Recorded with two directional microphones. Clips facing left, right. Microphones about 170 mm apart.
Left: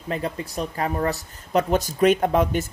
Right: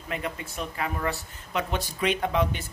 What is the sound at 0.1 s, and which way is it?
Speech, 35° left (ahead or behind).